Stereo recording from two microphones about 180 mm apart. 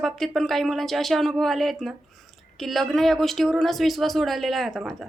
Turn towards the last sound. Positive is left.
turn(degrees=0)  # may be behind; listen again after turning